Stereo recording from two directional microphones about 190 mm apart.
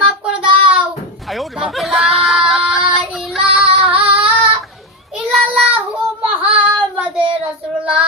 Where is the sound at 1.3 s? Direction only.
Centre (ahead or behind).